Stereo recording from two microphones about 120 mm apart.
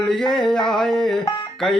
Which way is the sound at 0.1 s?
5° left (ahead or behind).